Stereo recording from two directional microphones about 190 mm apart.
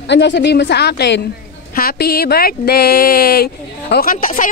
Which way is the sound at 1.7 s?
50° left (ahead or behind).